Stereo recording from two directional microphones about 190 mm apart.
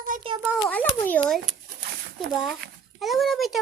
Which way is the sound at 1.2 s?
5° left (ahead or behind).